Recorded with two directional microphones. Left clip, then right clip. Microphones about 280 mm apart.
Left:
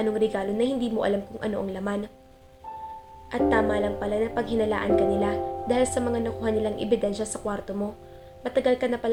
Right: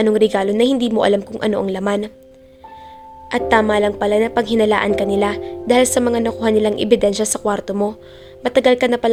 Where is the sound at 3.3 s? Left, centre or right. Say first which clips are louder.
Right 8 dB; right.